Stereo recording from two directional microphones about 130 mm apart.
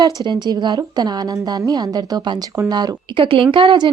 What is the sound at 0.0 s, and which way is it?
A woman's voice, 35° right (ahead or behind).